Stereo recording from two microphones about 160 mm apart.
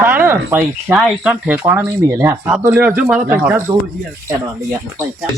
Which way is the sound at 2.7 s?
5° right (ahead or behind).